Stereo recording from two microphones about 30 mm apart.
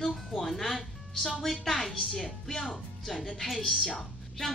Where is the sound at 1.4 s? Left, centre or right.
Centre.